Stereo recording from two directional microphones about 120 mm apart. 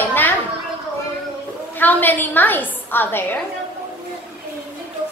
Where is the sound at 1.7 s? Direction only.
15° left (ahead or behind).